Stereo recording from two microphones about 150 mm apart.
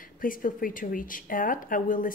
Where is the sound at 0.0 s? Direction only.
65° left (ahead or behind).